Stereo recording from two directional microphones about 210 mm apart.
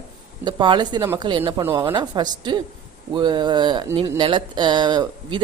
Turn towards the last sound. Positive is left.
turn(degrees=-20)  # may be behind; listen again after turning